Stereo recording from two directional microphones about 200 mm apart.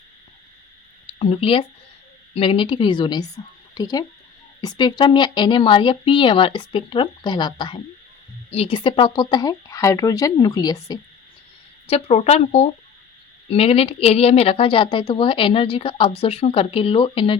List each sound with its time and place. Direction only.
1.2 s a woman's voice: 30° left (ahead or behind)
11.9 s a woman's voice: 30° left (ahead or behind)